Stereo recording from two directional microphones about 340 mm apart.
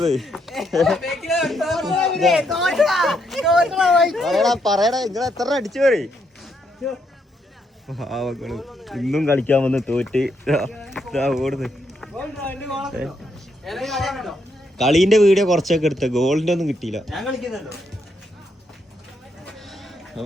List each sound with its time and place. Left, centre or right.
0.0 s speech: centre
19.5 s sheep: centre